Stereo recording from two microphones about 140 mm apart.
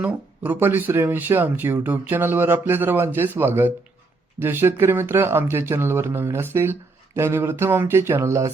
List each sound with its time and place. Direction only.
0.0 s speech: 10° right (ahead or behind)